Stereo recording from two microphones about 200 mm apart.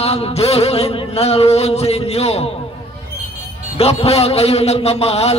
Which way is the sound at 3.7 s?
30° left (ahead or behind).